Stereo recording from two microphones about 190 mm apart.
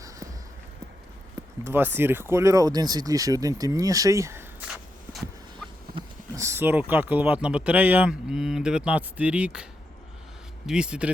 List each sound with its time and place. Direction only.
1.6 s speech: 10° right (ahead or behind)
4.7 s walk: centre (ahead or behind)
6.3 s speech: 15° right (ahead or behind)
10.7 s speech: 5° right (ahead or behind)